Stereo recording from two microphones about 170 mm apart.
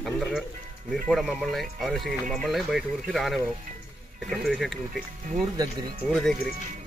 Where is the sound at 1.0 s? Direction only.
Centre (ahead or behind).